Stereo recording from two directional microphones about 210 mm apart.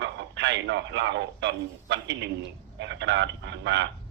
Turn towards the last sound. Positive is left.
turn(degrees=-55)  # may be behind; listen again after turning